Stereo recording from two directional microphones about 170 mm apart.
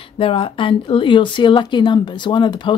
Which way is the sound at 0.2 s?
30° left (ahead or behind).